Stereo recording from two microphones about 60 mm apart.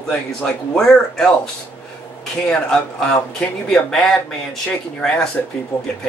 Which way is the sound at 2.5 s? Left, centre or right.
Centre.